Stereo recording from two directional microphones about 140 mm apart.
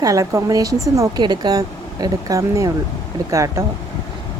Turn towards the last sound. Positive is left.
turn(degrees=-20)  # may be behind; listen again after turning